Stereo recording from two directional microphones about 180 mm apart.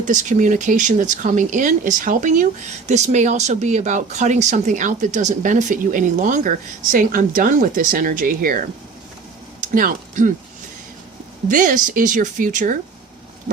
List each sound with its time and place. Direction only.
0.0 s speech: 45° right (ahead or behind)
11.4 s speech: 45° right (ahead or behind)